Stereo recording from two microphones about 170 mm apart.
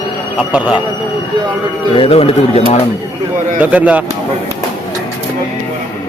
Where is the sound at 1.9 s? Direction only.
35° left (ahead or behind).